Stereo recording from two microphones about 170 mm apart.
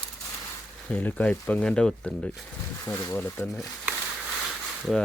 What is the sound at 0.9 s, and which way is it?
Speech, 10° left (ahead or behind).